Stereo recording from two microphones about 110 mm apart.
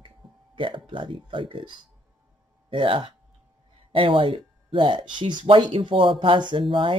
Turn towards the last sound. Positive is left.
turn(degrees=-50)  # may be behind; listen again after turning